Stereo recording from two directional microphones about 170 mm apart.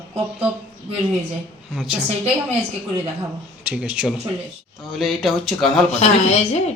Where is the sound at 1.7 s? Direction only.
5° right (ahead or behind).